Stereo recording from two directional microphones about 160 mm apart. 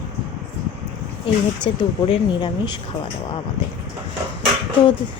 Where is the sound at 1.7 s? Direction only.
35° left (ahead or behind).